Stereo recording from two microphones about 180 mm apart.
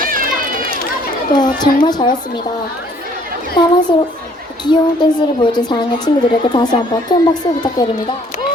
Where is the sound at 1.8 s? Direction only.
25° left (ahead or behind).